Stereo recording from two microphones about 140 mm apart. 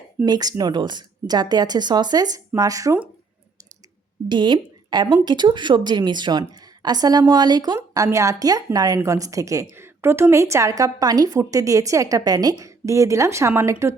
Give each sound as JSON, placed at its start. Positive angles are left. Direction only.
{"t": 0.3, "sound": "a woman's voice", "side_deg": -30}
{"t": 4.3, "sound": "a woman's voice", "side_deg": -35}